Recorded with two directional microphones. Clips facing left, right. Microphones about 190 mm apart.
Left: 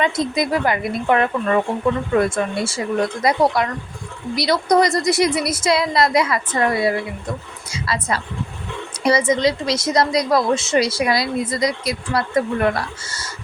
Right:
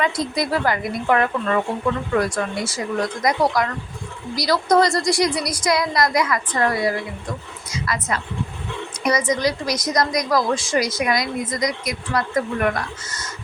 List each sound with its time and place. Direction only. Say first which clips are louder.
0.0 s a woman's voice: left 2 dB; 20° left (ahead or behind)